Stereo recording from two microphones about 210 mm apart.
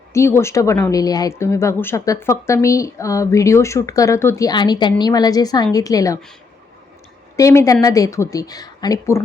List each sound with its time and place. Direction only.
0.1 s speech: 15° left (ahead or behind)
7.3 s speech: 15° left (ahead or behind)